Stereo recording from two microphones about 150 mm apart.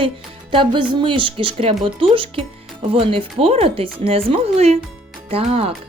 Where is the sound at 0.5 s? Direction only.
35° right (ahead or behind).